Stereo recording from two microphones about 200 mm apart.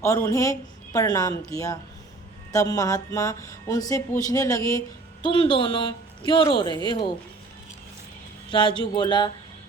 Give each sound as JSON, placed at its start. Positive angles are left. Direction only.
{"t": 0.0, "sound": "speech", "side_deg": 15}
{"t": 8.4, "sound": "speech", "side_deg": 25}